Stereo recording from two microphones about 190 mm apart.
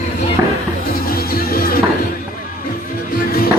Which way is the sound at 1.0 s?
50° left (ahead or behind).